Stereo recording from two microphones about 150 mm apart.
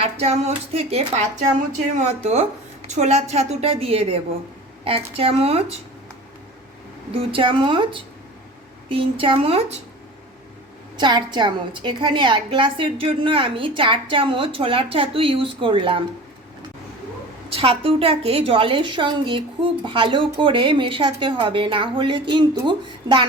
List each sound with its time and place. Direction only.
0.0 s a woman's voice: 45° right (ahead or behind)
7.1 s a woman's voice: 35° right (ahead or behind)
10.9 s a woman's voice: 30° right (ahead or behind)
17.5 s a woman's voice: 40° right (ahead or behind)